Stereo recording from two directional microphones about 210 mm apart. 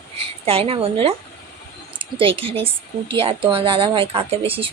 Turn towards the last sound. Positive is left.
turn(degrees=-25)  # may be behind; listen again after turning